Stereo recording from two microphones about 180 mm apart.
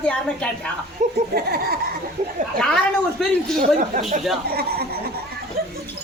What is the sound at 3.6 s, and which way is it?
Speech, 45° right (ahead or behind).